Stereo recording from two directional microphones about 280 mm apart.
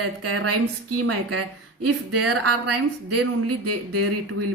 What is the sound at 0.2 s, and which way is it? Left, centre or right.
A woman's voice, right.